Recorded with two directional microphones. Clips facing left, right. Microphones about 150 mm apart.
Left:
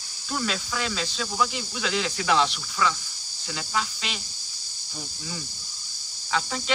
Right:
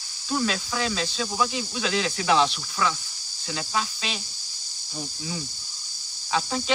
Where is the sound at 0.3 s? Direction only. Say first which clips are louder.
Right 3 dB; 15° right (ahead or behind).